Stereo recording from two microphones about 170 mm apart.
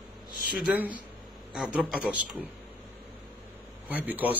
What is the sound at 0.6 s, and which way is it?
A man's voice, 10° right (ahead or behind).